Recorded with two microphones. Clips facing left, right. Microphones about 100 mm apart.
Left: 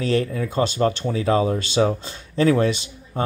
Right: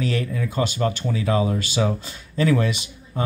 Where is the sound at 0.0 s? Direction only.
35° left (ahead or behind).